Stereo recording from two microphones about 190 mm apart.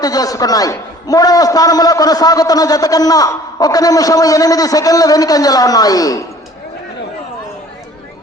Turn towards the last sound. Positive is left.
turn(degrees=20)  # may be behind; listen again after turning